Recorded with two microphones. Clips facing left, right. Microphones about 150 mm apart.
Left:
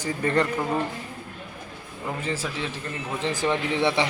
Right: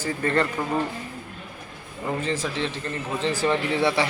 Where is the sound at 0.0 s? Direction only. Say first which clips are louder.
Even; 15° left (ahead or behind).